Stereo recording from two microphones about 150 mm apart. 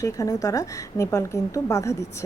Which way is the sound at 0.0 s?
20° left (ahead or behind).